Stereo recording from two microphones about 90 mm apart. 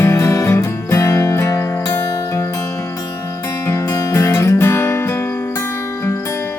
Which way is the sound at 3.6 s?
35° left (ahead or behind).